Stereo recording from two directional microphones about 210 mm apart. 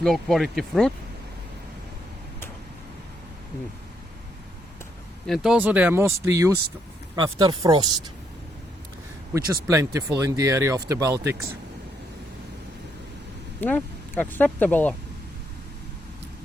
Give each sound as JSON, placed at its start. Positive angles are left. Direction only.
{"t": 0.0, "sound": "speech", "side_deg": 0}
{"t": 5.2, "sound": "speech", "side_deg": 0}
{"t": 9.6, "sound": "speech", "side_deg": -15}
{"t": 13.6, "sound": "speech", "side_deg": 10}